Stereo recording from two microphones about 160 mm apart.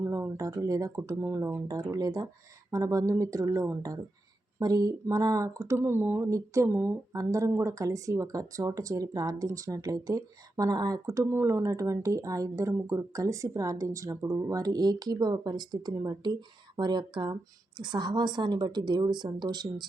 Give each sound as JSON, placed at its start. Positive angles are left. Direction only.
{"t": 0.0, "sound": "speech", "side_deg": -15}